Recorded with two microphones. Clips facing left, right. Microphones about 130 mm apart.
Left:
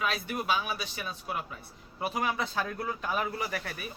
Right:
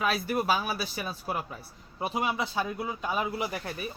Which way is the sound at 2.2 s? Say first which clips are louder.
Right 2 dB; 15° right (ahead or behind).